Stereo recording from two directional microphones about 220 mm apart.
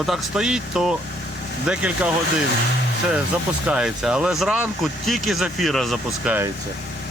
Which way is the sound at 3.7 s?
5° right (ahead or behind).